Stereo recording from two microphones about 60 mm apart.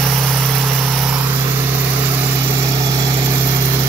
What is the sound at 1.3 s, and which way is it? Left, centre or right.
Vehicle, right.